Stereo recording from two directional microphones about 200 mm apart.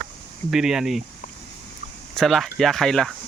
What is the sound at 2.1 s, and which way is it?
Speech, centre (ahead or behind).